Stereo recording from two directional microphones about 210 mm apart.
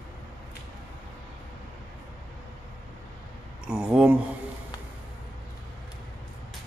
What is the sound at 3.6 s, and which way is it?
Speech, 5° right (ahead or behind).